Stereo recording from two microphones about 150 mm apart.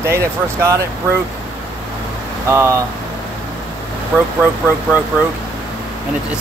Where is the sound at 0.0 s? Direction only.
20° right (ahead or behind).